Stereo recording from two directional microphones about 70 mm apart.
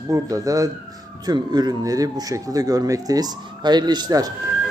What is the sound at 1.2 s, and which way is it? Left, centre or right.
Speech, right.